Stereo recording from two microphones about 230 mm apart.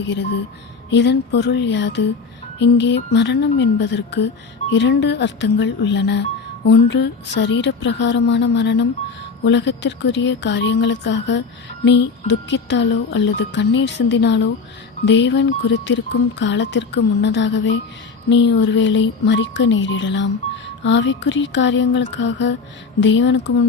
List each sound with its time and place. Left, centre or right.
0.1 s speech: left